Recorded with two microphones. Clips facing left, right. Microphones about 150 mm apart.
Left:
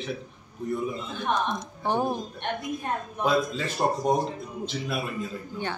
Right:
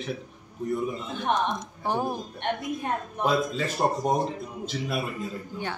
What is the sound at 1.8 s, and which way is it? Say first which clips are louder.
Speech: left 2 dB; 5° right (ahead or behind).